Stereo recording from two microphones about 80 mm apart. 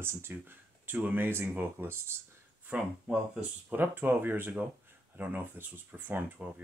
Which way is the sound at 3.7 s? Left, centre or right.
Right.